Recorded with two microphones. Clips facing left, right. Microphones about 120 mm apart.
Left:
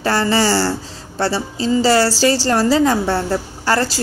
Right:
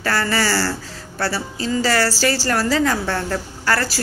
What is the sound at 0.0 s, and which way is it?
Speech, 20° left (ahead or behind).